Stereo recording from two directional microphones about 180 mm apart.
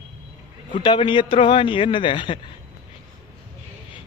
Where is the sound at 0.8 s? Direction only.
25° left (ahead or behind).